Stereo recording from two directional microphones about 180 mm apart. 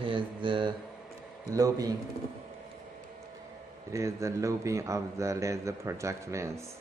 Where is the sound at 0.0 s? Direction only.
30° right (ahead or behind).